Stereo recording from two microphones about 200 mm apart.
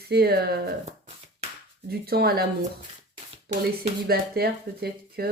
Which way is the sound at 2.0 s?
50° right (ahead or behind).